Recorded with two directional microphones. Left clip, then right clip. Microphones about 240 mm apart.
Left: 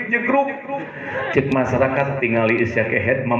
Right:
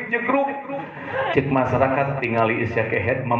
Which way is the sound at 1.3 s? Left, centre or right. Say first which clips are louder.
Left 2 dB; left.